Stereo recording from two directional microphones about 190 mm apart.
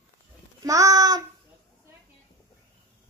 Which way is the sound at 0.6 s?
20° right (ahead or behind).